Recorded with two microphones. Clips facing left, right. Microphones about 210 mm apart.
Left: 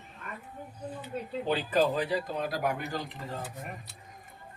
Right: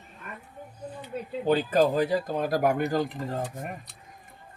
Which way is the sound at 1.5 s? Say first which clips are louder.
Right 5 dB; 45° right (ahead or behind).